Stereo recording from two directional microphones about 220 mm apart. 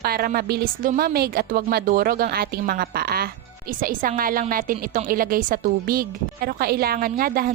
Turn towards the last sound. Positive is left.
turn(degrees=-40)  # may be behind; listen again after turning